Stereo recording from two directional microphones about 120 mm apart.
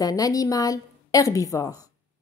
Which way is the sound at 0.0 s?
30° left (ahead or behind).